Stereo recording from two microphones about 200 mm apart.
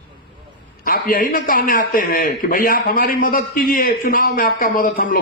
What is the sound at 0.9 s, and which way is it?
A man's voice, 45° left (ahead or behind).